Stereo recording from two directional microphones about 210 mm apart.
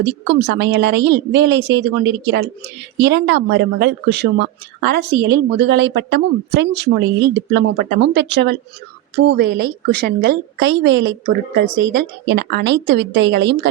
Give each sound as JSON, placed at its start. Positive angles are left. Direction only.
{"t": 0.0, "sound": "speech", "side_deg": -55}